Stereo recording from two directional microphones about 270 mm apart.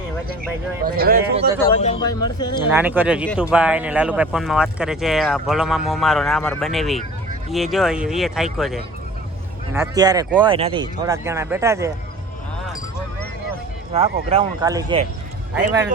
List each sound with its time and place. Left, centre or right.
0.9 s speech: right
1.8 s a man's voice: centre
2.6 s speech: centre
9.7 s speech: centre
13.9 s speech: right